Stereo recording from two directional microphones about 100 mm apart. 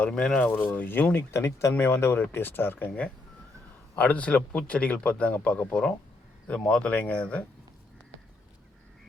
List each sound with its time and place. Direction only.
0.0 s speech: 10° left (ahead or behind)